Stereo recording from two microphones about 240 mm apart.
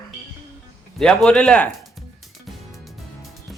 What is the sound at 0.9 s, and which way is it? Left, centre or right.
Speech, centre.